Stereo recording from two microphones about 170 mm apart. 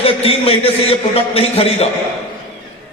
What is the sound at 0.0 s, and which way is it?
A man's voice, 35° left (ahead or behind).